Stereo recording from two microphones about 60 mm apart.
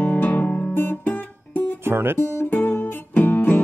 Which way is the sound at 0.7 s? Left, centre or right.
Left.